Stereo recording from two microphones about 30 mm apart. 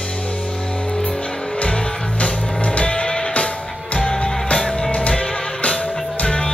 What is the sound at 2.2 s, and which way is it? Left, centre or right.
Music, left.